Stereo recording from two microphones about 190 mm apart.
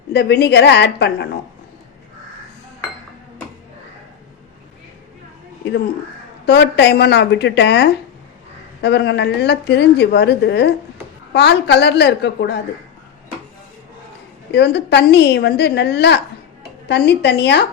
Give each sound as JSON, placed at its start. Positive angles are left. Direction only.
{"t": 0.1, "sound": "a woman's voice", "side_deg": 60}
{"t": 6.4, "sound": "a woman's voice", "side_deg": 65}
{"t": 14.5, "sound": "a woman's voice", "side_deg": 60}